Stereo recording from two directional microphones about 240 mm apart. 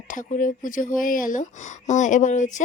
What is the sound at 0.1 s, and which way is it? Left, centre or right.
Speech, left.